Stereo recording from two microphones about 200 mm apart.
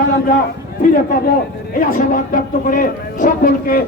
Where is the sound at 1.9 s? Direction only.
45° left (ahead or behind).